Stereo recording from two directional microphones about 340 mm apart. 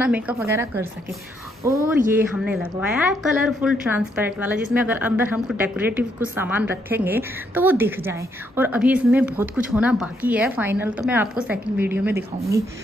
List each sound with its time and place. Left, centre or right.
0.0 s a woman's voice: centre
2.1 s a woman's voice: centre